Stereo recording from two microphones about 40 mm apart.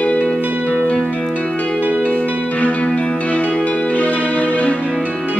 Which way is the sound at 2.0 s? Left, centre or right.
Left.